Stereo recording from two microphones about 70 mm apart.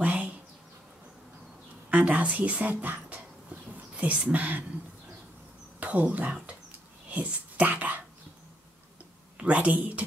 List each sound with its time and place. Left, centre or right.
0.0 s a sound: right
1.9 s a woman's voice: right
5.8 s speech: right
7.1 s whispering: right
9.4 s a woman's voice: centre